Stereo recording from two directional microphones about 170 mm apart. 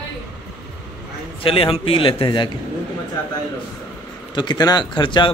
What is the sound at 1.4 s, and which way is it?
A man's voice, 30° left (ahead or behind).